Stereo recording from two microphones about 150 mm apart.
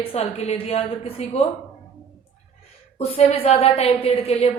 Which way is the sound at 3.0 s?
45° left (ahead or behind).